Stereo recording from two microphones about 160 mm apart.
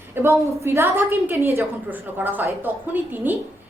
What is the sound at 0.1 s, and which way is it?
A woman's voice, 15° right (ahead or behind).